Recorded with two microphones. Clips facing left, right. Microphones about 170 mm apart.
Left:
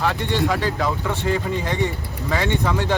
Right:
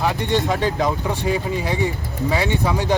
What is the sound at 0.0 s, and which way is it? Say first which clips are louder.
Speech: right 1 dB; 15° right (ahead or behind).